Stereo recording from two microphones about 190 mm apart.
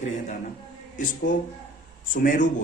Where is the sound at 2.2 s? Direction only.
45° left (ahead or behind).